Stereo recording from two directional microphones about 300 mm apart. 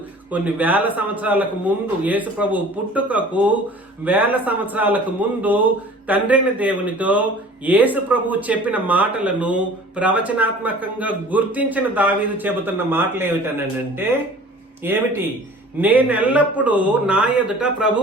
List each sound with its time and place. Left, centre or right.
0.3 s speech: centre